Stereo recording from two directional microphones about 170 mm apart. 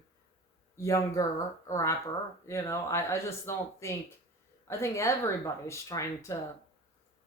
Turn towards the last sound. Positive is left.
turn(degrees=20)  # may be behind; listen again after turning